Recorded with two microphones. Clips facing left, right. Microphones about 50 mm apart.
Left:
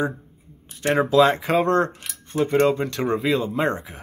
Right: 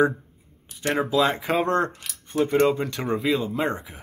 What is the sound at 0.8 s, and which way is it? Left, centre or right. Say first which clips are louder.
Speech: left 5 dB; centre.